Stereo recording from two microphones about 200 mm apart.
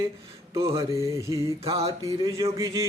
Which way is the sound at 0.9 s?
15° right (ahead or behind).